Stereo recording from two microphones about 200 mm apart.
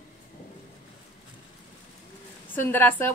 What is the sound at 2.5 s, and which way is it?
Speech, 10° left (ahead or behind).